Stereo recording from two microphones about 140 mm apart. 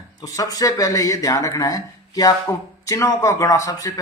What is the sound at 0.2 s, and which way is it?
A man's voice, 25° left (ahead or behind).